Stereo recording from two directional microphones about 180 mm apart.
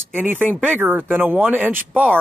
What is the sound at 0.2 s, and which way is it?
Speech, 10° right (ahead or behind).